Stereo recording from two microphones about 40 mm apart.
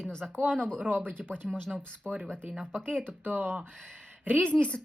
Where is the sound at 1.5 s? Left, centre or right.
Centre.